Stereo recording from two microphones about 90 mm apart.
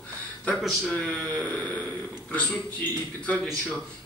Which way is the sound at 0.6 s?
Centre (ahead or behind).